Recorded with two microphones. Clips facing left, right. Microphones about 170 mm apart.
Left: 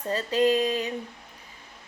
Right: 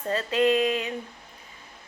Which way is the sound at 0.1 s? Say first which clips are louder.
Even; 35° left (ahead or behind).